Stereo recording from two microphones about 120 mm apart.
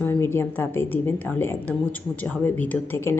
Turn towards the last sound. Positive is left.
turn(degrees=20)  # may be behind; listen again after turning